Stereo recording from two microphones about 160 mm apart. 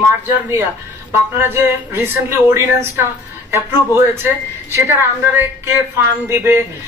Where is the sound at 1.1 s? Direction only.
15° right (ahead or behind).